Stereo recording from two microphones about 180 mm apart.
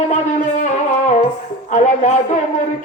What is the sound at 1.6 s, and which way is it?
Speech, 40° left (ahead or behind).